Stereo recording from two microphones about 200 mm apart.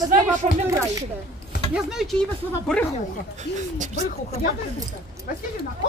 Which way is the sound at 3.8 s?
35° right (ahead or behind).